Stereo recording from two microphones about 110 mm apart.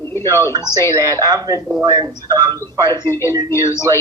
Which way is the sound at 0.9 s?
30° right (ahead or behind).